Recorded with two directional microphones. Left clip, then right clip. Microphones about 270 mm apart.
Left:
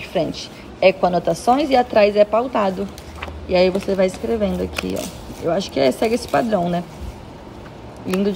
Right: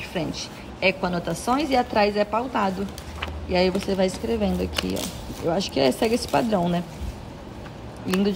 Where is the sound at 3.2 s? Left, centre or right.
Centre.